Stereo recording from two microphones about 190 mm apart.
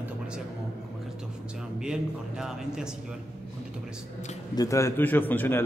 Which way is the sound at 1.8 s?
5° right (ahead or behind).